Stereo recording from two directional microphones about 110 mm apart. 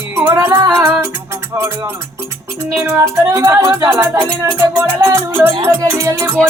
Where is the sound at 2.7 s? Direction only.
20° right (ahead or behind).